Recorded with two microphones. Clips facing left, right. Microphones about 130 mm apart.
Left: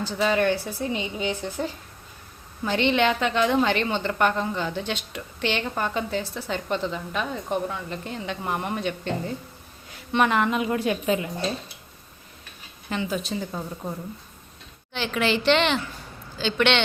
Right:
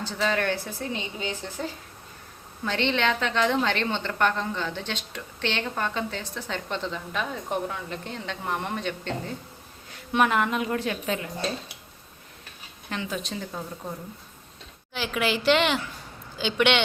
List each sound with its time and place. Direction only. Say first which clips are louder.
0.0 s a woman's voice: left 4 dB; 10° left (ahead or behind)
2.6 s a woman's voice: left 4 dB; 10° left (ahead or behind)
10.1 s a woman's voice: left 1 dB; 5° right (ahead or behind)
12.9 s a woman's voice: left 4 dB; centre (ahead or behind)
14.9 s a woman's voice: left 2 dB; 5° right (ahead or behind)